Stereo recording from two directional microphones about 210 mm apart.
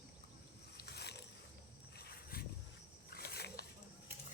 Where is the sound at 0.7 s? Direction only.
50° left (ahead or behind).